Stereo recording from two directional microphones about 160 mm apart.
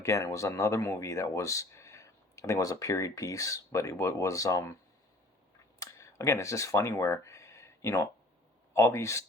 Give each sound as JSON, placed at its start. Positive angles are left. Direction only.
{"t": 0.0, "sound": "speech", "side_deg": 20}
{"t": 5.8, "sound": "a sound", "side_deg": 20}
{"t": 8.7, "sound": "speech", "side_deg": 20}